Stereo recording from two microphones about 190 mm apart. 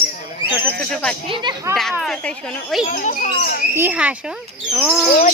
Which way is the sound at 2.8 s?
40° left (ahead or behind).